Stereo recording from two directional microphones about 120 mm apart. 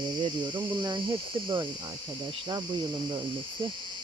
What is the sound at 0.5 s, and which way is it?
Speech, 35° right (ahead or behind).